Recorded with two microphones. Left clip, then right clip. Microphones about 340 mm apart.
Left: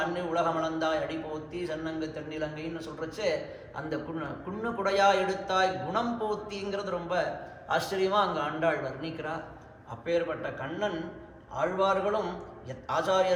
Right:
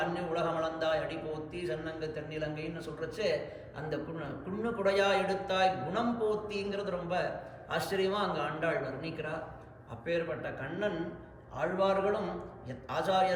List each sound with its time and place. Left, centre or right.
0.2 s a man's voice: centre